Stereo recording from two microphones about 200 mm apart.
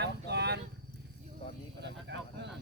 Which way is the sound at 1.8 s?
60° right (ahead or behind).